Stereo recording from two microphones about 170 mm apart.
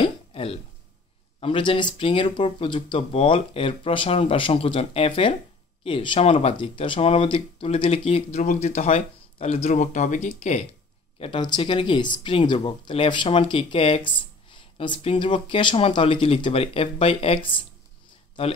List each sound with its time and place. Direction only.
0.0 s a sound: 35° left (ahead or behind)
1.4 s speech: 30° left (ahead or behind); by 10.6 s 45° left (ahead or behind)
11.1 s speech: 30° left (ahead or behind)